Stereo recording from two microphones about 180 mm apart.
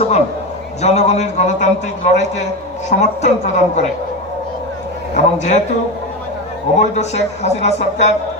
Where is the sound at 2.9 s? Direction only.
40° left (ahead or behind).